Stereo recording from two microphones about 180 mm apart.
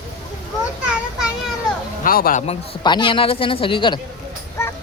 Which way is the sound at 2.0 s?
55° left (ahead or behind).